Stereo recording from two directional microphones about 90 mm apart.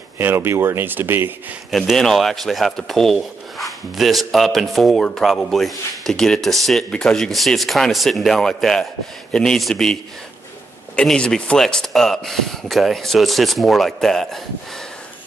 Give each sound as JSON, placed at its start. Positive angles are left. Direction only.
{"t": 0.2, "sound": "speech", "side_deg": -25}
{"t": 1.7, "sound": "speech", "side_deg": 0}
{"t": 11.0, "sound": "speech", "side_deg": 10}